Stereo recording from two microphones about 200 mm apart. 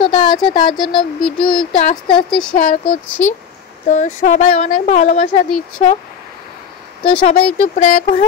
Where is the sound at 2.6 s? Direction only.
40° left (ahead or behind).